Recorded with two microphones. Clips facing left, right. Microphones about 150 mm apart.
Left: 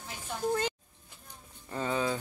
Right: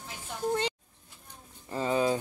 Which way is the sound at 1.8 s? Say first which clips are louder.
Right 4 dB; 30° right (ahead or behind).